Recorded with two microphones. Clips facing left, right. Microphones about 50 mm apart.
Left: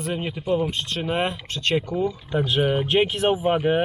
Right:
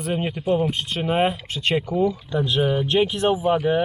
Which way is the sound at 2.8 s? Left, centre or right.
Centre.